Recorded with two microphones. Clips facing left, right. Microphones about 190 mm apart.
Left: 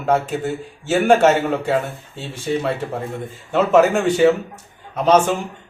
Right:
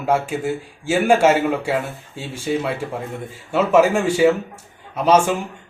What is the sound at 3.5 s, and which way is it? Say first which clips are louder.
Speech: left 1 dB; 5° right (ahead or behind).